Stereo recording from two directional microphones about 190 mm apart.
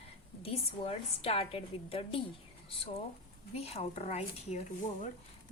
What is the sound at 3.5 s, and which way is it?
Speech, 30° left (ahead or behind).